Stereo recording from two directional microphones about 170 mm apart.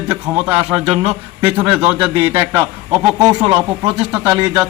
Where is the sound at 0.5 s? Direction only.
35° right (ahead or behind).